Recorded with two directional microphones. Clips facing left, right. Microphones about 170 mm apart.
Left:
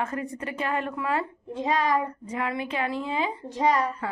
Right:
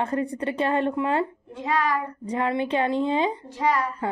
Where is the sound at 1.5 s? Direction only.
20° left (ahead or behind).